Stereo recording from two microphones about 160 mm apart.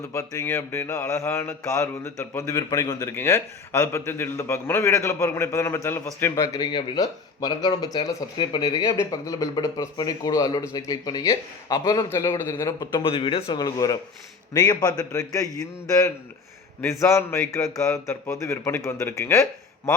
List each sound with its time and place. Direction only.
0.1 s mantra: 15° left (ahead or behind)
17.0 s a man's voice: 15° left (ahead or behind)